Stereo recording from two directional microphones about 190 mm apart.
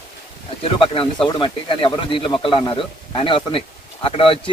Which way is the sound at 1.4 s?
25° left (ahead or behind).